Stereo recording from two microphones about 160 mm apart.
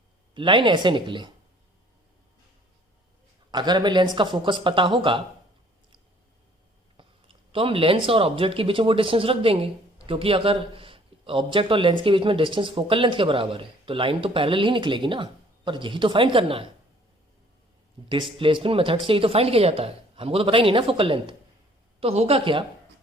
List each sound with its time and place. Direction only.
0.3 s speech: 30° right (ahead or behind)
3.5 s speech: 25° right (ahead or behind)
7.5 s speech: 35° right (ahead or behind)
18.1 s speech: 30° right (ahead or behind)